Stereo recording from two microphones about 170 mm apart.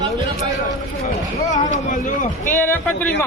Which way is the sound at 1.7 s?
50° left (ahead or behind).